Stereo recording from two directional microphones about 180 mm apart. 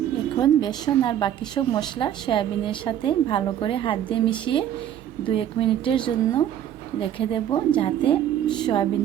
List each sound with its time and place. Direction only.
0.3 s a woman's voice: 25° left (ahead or behind)